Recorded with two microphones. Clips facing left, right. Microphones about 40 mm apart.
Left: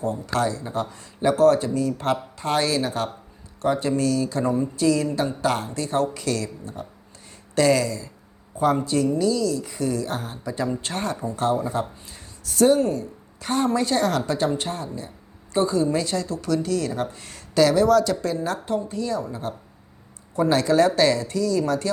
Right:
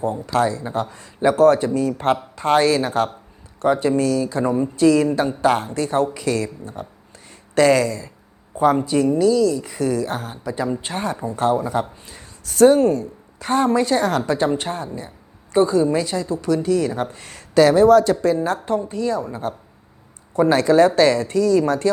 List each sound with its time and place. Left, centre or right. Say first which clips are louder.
0.3 s speech: right 5 dB; right
1.3 s speech: right 3 dB; right
4.8 s speech: right 7 dB; right
8.8 s speech: right 4 dB; right
9.7 s speech: right 4 dB; right
10.2 s speech: right 3 dB; centre; by 21.8 s right